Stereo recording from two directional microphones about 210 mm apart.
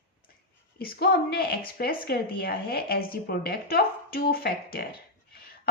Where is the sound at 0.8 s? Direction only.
45° left (ahead or behind).